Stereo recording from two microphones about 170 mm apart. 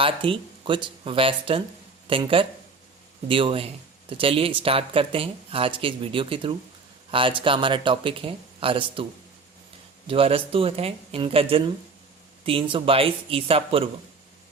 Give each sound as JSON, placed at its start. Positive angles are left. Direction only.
{"t": 0.0, "sound": "speech", "side_deg": -30}
{"t": 10.1, "sound": "speech", "side_deg": -35}